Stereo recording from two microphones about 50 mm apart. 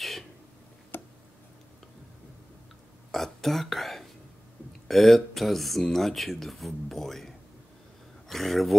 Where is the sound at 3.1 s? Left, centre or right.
Centre.